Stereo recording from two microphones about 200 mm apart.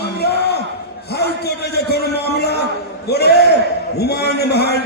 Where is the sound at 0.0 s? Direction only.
55° left (ahead or behind).